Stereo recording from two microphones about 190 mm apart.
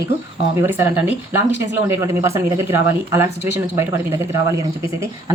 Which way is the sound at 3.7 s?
15° right (ahead or behind).